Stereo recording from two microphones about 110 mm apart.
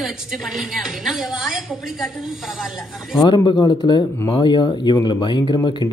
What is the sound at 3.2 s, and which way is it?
Speech, 45° left (ahead or behind).